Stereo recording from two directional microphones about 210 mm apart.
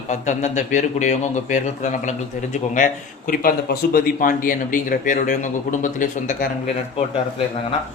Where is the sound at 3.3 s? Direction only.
45° left (ahead or behind).